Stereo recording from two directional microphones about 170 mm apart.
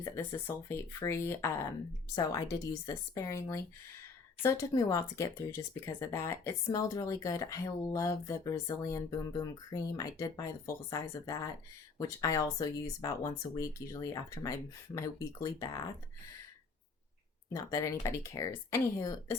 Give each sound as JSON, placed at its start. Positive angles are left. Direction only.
{"t": 0.0, "sound": "speech", "side_deg": 15}
{"t": 2.8, "sound": "speech", "side_deg": 20}
{"t": 17.5, "sound": "speech", "side_deg": 20}